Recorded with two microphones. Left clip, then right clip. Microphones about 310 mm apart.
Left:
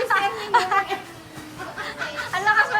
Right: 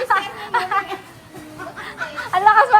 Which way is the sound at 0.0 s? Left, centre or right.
Centre.